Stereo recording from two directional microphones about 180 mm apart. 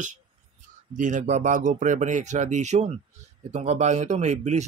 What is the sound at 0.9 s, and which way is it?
A man's voice, 45° right (ahead or behind).